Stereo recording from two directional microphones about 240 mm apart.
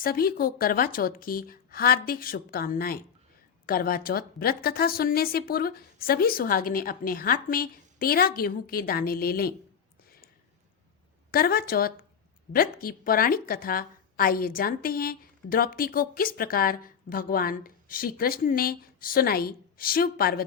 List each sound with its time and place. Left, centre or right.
0.0 s a woman's voice: left
11.3 s a woman's voice: left